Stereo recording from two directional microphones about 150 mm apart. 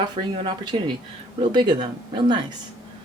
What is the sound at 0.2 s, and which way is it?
Speech, 30° right (ahead or behind).